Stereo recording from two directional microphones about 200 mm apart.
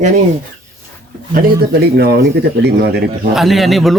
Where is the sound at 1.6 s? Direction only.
55° right (ahead or behind).